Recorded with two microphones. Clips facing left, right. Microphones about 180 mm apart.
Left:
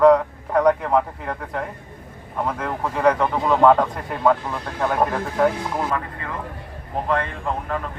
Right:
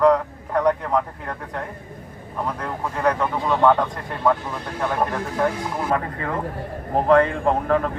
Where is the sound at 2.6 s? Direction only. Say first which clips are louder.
Left 3 dB; 5° left (ahead or behind).